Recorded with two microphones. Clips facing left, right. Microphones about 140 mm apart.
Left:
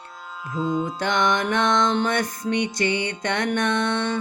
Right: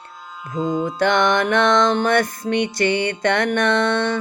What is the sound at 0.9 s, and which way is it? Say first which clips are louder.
Music: right 8 dB; 60° right (ahead or behind).